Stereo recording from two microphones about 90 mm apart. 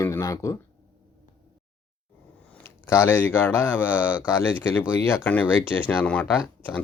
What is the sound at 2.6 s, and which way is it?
Speech, 30° left (ahead or behind).